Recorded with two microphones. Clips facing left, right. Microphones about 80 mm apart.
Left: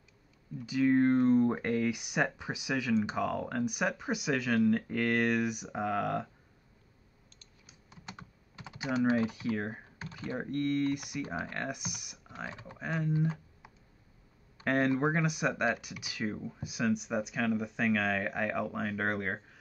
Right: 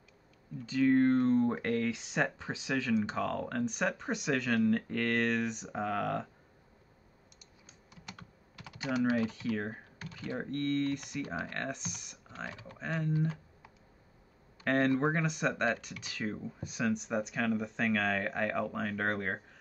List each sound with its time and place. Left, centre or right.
0.6 s speech: centre
8.2 s computer keyboard: left
8.9 s speech: left
9.2 s speech: centre
11.2 s speech: left
11.5 s speech: centre
14.6 s speech: centre